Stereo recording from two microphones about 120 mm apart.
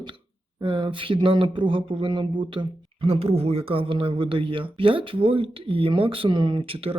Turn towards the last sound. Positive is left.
turn(degrees=-50)  # may be behind; listen again after turning